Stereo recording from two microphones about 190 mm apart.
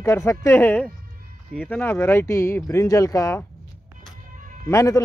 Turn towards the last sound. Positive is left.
turn(degrees=15)  # may be behind; listen again after turning